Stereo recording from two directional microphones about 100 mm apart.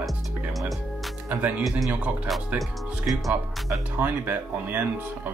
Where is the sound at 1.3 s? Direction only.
15° right (ahead or behind).